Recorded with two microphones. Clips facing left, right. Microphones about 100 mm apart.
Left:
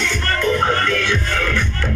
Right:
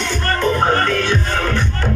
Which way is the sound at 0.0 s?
35° right (ahead or behind).